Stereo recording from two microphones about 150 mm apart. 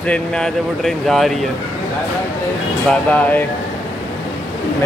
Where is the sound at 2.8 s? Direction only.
10° left (ahead or behind).